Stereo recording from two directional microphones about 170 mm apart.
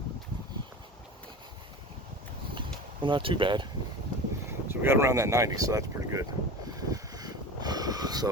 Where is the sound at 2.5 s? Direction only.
30° right (ahead or behind).